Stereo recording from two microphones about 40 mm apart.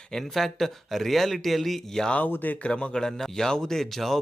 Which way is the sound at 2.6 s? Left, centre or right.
Left.